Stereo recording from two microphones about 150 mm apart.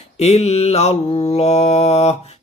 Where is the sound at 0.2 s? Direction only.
45° left (ahead or behind).